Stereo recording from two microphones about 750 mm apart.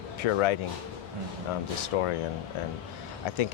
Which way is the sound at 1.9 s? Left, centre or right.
Left.